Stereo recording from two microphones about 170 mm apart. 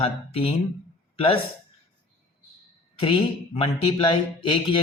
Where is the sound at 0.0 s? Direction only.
35° left (ahead or behind).